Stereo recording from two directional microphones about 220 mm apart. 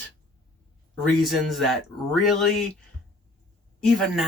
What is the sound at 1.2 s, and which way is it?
Speech, centre (ahead or behind).